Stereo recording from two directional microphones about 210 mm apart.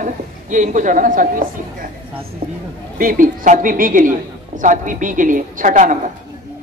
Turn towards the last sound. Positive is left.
turn(degrees=-35)  # may be behind; listen again after turning